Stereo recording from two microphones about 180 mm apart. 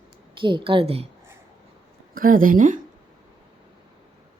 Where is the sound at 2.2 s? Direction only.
50° right (ahead or behind).